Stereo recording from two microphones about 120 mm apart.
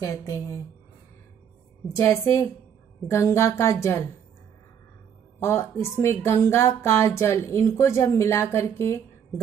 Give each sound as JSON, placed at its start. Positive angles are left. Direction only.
{"t": 0.0, "sound": "speech", "side_deg": 25}
{"t": 2.0, "sound": "speech", "side_deg": 20}
{"t": 5.4, "sound": "speech", "side_deg": 20}